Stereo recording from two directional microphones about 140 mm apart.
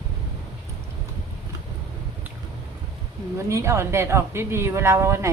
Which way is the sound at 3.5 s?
20° right (ahead or behind).